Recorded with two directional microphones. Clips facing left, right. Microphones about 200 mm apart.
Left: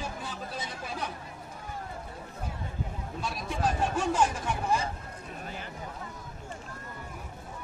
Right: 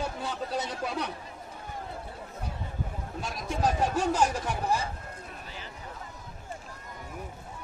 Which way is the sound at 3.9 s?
40° right (ahead or behind).